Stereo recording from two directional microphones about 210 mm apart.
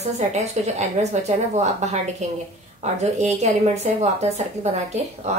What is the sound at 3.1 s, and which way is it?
A woman's voice, 30° right (ahead or behind).